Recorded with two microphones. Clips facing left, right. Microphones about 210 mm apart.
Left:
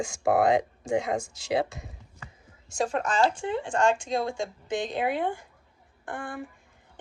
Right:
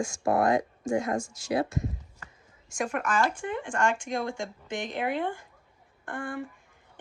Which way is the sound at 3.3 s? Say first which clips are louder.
Left 3 dB; 20° left (ahead or behind).